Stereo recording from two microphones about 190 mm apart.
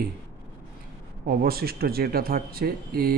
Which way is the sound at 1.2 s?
50° right (ahead or behind).